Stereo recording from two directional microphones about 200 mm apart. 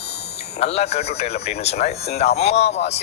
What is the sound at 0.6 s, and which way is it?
Speech, 30° left (ahead or behind).